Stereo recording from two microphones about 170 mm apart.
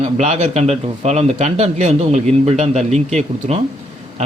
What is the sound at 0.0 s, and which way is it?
A man's voice, 45° right (ahead or behind).